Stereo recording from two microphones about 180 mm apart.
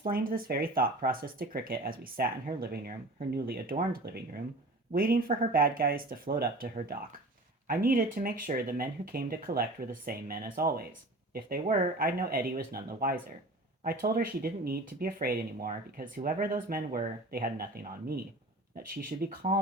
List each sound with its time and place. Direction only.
0.0 s speech: 50° right (ahead or behind)
7.7 s speech: 55° right (ahead or behind)
19.2 s speech: 55° right (ahead or behind)